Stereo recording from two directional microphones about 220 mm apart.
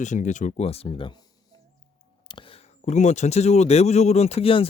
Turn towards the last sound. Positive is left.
turn(degrees=25)  # may be behind; listen again after turning